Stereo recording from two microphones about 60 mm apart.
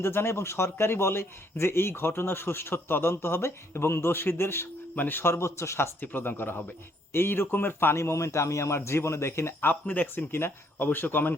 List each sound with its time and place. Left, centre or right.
0.0 s a man's voice: left
5.3 s a man's voice: left
6.0 s speech: left
7.9 s a man's voice: left